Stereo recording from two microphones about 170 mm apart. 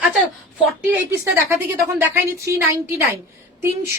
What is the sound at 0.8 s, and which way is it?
A woman's voice, 15° right (ahead or behind).